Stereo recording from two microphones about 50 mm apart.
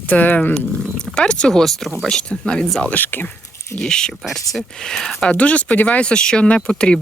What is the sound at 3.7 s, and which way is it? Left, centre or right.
Speech, centre.